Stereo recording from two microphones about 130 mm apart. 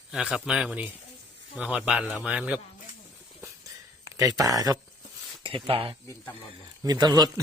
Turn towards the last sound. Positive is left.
turn(degrees=-30)  # may be behind; listen again after turning